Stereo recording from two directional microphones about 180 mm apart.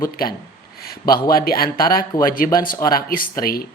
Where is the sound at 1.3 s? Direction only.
55° left (ahead or behind).